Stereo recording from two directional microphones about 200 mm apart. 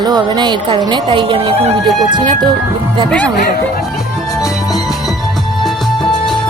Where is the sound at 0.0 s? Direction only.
20° right (ahead or behind).